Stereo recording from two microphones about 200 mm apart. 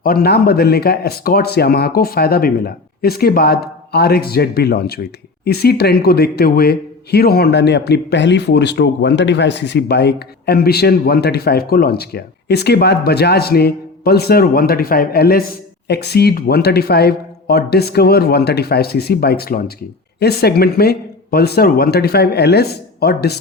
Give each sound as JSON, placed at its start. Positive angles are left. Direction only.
{"t": 0.0, "sound": "speech", "side_deg": 50}